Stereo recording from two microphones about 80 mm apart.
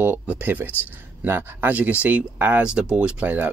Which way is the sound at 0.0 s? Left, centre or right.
Right.